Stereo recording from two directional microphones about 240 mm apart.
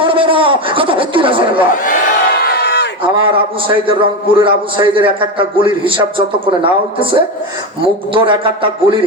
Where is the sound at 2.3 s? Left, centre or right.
Left.